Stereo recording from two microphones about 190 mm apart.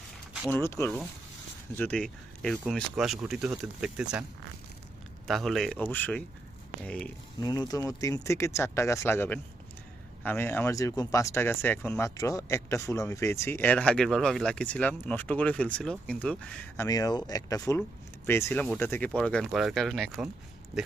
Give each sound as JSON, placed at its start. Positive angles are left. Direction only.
{"t": 0.5, "sound": "speech", "side_deg": 15}
{"t": 5.3, "sound": "speech", "side_deg": 0}
{"t": 7.3, "sound": "speech", "side_deg": 20}
{"t": 16.8, "sound": "speech", "side_deg": 20}